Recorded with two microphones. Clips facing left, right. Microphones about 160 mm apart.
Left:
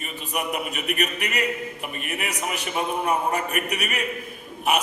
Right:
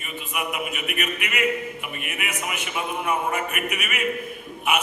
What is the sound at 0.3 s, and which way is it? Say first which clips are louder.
A man's voice: left 1 dB; 40° left (ahead or behind).